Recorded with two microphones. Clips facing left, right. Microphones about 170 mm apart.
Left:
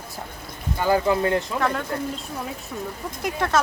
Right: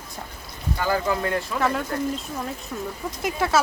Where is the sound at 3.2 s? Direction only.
5° right (ahead or behind).